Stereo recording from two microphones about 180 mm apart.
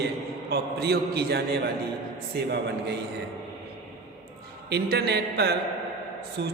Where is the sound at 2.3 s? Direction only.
65° right (ahead or behind).